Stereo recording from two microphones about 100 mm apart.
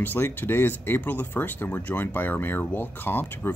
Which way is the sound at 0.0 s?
20° left (ahead or behind).